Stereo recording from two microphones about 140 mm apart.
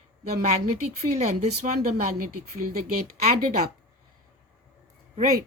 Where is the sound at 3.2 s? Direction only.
90° right.